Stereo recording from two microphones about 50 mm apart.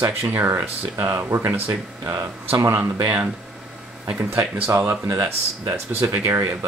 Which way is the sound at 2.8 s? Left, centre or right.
Right.